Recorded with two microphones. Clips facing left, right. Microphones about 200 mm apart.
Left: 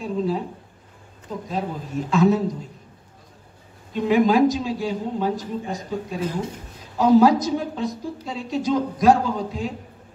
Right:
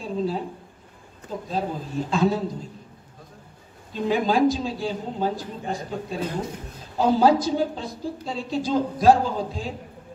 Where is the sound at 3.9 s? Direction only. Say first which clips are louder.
Left 4 dB; 30° right (ahead or behind).